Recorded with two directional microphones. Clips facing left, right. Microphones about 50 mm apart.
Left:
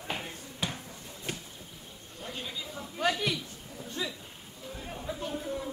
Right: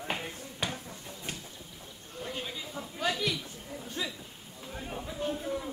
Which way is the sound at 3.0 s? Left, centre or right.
Left.